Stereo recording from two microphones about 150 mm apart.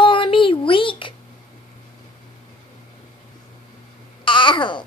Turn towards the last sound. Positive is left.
turn(degrees=30)  # may be behind; listen again after turning